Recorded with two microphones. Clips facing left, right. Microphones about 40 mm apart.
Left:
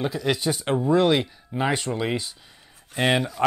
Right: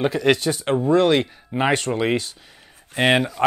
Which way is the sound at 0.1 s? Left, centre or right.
Right.